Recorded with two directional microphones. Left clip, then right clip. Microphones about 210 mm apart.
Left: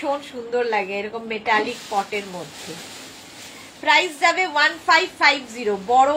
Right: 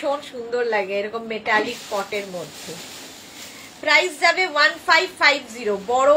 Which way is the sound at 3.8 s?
25° right (ahead or behind).